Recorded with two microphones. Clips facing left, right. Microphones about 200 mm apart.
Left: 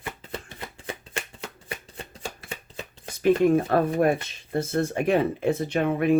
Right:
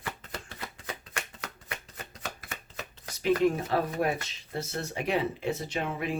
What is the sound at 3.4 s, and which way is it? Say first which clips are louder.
Speech: left 6 dB; 50° left (ahead or behind).